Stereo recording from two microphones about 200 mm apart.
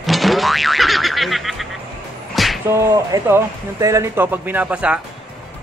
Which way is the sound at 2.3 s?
Centre (ahead or behind).